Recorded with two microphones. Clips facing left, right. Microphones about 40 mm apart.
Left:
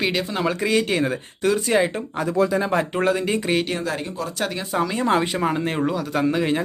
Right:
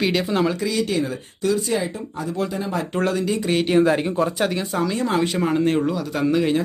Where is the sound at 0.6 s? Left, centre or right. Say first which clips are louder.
Left 2 dB; left.